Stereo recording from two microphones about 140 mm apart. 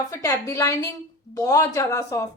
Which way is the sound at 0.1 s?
20° left (ahead or behind).